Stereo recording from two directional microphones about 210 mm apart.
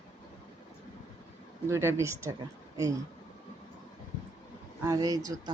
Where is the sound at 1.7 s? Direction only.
10° right (ahead or behind).